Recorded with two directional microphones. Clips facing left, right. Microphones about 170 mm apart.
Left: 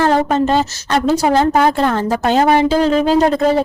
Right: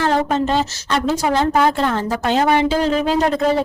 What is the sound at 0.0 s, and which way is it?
Speech, 45° left (ahead or behind).